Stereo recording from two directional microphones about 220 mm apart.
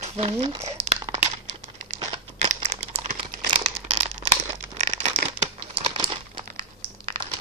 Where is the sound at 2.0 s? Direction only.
25° right (ahead or behind).